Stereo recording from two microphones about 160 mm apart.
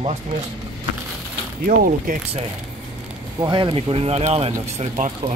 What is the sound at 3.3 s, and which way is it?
Speech, 30° right (ahead or behind).